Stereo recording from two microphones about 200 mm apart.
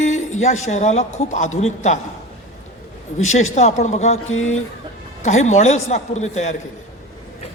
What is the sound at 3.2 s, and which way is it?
Speech, 35° left (ahead or behind).